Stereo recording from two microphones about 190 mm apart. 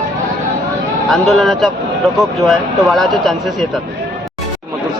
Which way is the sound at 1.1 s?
Centre (ahead or behind).